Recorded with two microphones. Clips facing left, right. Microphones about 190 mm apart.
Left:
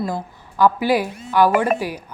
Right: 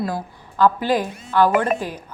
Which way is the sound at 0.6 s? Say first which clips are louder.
Left 1 dB; 10° left (ahead or behind).